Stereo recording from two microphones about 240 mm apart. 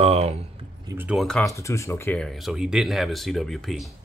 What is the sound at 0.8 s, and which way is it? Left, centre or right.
Speech, centre.